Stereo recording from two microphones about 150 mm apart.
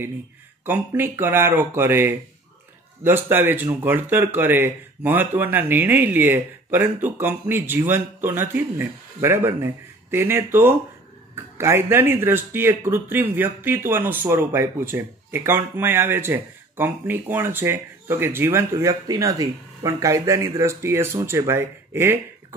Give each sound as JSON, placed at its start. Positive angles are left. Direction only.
{"t": 0.7, "sound": "speech", "side_deg": -15}